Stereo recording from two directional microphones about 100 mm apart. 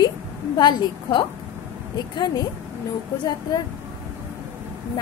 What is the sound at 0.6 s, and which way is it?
A woman's voice, 45° left (ahead or behind).